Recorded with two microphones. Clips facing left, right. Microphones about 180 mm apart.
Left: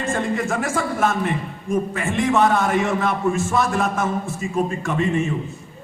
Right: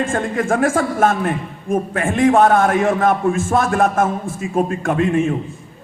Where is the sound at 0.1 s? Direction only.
50° right (ahead or behind).